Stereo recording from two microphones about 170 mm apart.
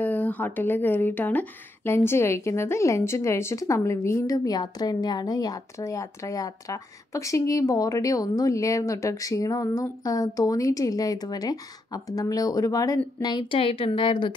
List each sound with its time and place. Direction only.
0.0 s speech: 10° left (ahead or behind); by 14.3 s 30° left (ahead or behind)